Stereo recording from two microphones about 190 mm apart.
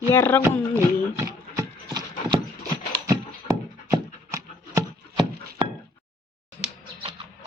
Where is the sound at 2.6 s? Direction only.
20° right (ahead or behind).